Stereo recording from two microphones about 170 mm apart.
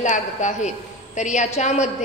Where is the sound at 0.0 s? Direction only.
45° left (ahead or behind).